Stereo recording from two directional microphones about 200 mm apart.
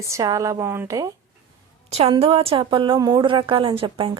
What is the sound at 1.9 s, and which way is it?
A woman's voice, 30° right (ahead or behind).